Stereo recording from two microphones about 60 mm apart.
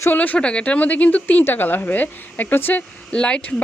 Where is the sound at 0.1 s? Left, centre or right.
Left.